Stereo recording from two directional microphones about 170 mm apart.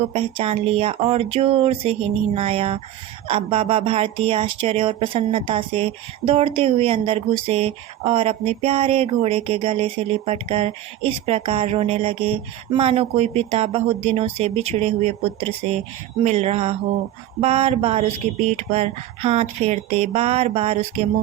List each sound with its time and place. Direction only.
0.1 s speech: 35° right (ahead or behind)